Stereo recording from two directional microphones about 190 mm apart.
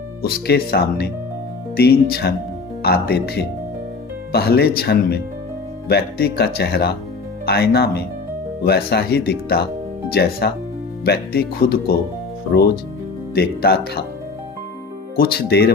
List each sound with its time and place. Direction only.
0.2 s speech: 55° left (ahead or behind)
15.1 s speech: 55° left (ahead or behind)